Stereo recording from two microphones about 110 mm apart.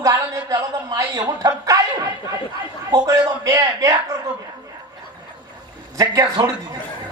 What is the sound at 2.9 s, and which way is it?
A man's voice, 30° right (ahead or behind).